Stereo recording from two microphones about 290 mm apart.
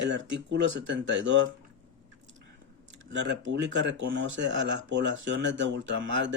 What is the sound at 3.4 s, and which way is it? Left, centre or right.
Speech, right.